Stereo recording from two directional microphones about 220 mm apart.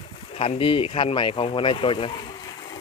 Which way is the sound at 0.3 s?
25° left (ahead or behind).